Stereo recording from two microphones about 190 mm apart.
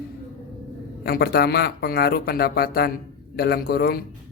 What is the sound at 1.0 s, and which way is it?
A man's voice, 55° left (ahead or behind).